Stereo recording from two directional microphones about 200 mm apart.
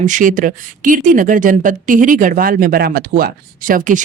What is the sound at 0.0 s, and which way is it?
Speech, 40° right (ahead or behind).